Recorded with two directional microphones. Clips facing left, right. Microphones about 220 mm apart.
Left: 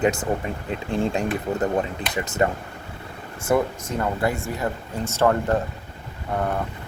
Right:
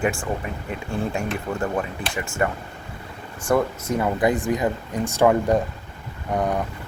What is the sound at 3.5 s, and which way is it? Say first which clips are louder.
Speech: even; 5° left (ahead or behind).